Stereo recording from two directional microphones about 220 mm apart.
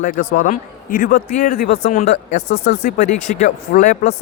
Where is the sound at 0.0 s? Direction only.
35° left (ahead or behind).